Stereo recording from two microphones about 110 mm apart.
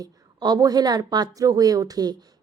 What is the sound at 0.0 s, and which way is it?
Speech, 40° right (ahead or behind).